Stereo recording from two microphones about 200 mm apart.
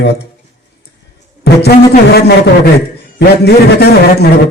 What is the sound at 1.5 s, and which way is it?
Music, 55° left (ahead or behind).